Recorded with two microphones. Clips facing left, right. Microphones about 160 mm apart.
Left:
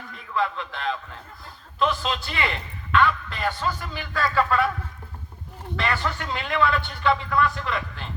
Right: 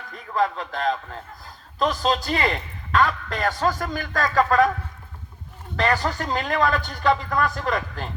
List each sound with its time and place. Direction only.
0.3 s a man's voice: 40° right (ahead or behind)
5.7 s a man's voice: 40° right (ahead or behind)